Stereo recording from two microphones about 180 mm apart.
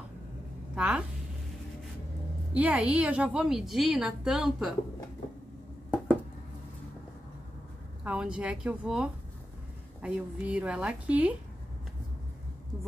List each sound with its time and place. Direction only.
0.7 s a woman's voice: 5° right (ahead or behind)
2.5 s a woman's voice: 10° right (ahead or behind)
8.0 s a woman's voice: 5° right (ahead or behind)